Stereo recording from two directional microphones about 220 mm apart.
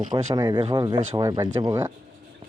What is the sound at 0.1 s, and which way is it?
Speech, 20° right (ahead or behind).